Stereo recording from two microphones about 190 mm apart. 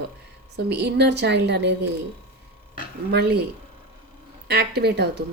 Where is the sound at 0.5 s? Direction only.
60° right (ahead or behind).